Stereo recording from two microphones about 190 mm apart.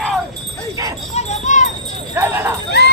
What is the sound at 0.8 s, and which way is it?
Jingle bell, 15° right (ahead or behind).